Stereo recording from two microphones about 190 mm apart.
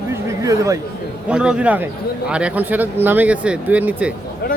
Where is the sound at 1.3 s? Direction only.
5° right (ahead or behind).